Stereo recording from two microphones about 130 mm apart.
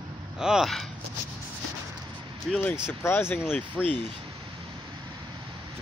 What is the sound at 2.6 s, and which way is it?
Speech, 15° left (ahead or behind).